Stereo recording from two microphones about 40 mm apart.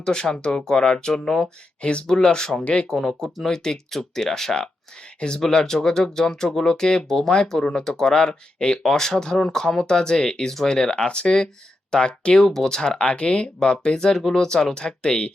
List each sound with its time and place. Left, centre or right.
0.0 s speech: centre
1.8 s speech: left
12.3 s speech: centre